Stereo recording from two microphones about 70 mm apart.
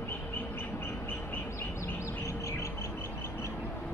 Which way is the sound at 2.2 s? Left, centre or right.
Left.